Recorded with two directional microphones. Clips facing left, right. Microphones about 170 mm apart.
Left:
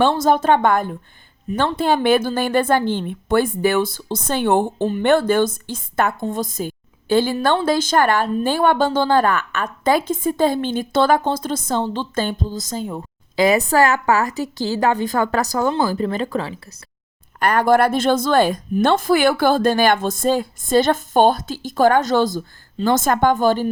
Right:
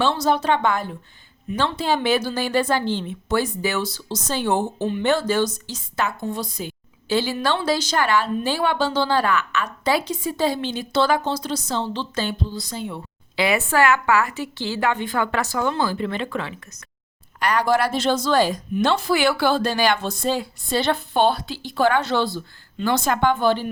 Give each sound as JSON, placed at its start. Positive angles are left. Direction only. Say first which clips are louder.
{"t": 0.0, "sound": "a woman's voice", "louder": "left 4 dB", "side_deg": 50}
{"t": 17.4, "sound": "a woman's voice", "louder": "left 5 dB", "side_deg": 50}